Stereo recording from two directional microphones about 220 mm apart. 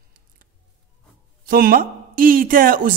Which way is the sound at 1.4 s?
40° right (ahead or behind).